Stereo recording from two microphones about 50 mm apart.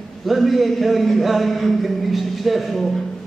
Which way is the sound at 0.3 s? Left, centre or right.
Centre.